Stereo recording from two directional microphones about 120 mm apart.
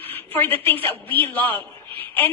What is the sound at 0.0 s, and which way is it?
A woman's voice, 15° left (ahead or behind).